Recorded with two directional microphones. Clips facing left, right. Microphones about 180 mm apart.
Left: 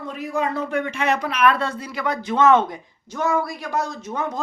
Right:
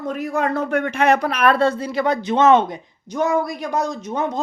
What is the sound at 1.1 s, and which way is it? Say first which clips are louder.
Speech: right 3 dB; 40° right (ahead or behind).